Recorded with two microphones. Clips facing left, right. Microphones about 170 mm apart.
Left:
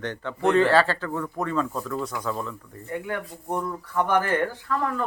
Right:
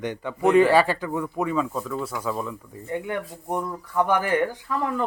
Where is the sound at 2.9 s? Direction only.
20° right (ahead or behind).